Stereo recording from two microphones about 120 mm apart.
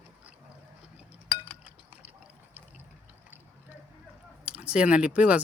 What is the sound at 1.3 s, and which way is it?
Chink, 10° left (ahead or behind).